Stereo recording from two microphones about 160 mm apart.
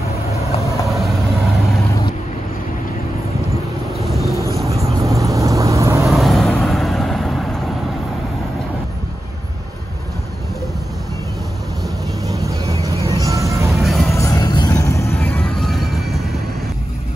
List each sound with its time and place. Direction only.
0.8 s vehicle: centre (ahead or behind)
4.0 s vehicle: centre (ahead or behind)
4.3 s vehicle: 20° left (ahead or behind)
5.1 s vehicle: 20° right (ahead or behind)
6.0 s vehicle: centre (ahead or behind)
12.3 s vehicle: 20° right (ahead or behind)
12.9 s vehicle: 20° left (ahead or behind)
13.2 s vehicle: 20° right (ahead or behind)
13.7 s music: centre (ahead or behind)
14.1 s vehicle: 20° left (ahead or behind)
15.1 s music: 5° left (ahead or behind)